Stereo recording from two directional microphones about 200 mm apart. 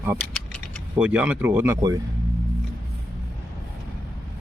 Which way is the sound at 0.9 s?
5° right (ahead or behind).